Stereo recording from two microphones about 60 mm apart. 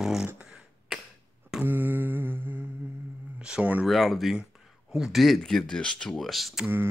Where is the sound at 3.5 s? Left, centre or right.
Right.